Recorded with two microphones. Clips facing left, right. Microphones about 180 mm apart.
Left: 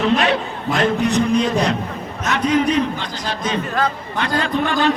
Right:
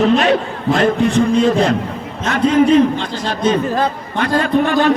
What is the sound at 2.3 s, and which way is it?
Speech, 50° right (ahead or behind).